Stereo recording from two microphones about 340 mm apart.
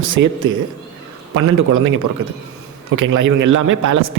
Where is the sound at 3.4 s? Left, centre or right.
Right.